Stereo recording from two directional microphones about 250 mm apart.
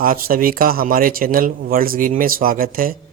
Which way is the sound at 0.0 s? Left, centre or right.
Right.